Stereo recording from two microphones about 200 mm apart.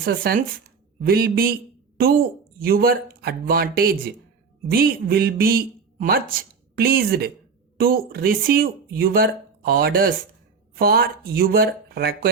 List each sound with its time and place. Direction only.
0.0 s a woman's voice: 50° right (ahead or behind)